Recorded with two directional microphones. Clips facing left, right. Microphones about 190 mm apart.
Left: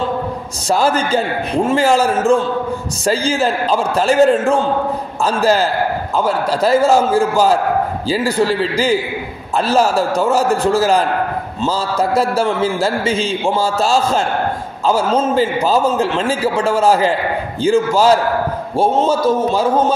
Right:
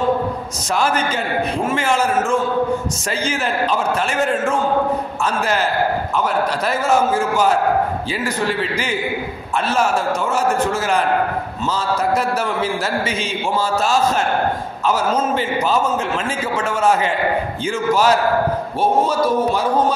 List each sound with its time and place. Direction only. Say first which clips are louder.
0.7 s a man's voice: left 4 dB; 30° left (ahead or behind)